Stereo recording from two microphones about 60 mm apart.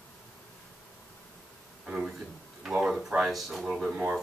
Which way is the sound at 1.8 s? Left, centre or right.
Centre.